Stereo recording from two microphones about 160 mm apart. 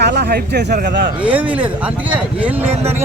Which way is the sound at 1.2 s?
10° right (ahead or behind).